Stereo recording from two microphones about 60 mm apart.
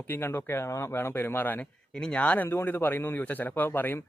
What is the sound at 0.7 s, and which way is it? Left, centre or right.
Speech, left.